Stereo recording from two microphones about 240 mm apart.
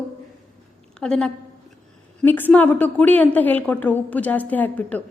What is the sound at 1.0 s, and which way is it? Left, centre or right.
A woman's voice, centre.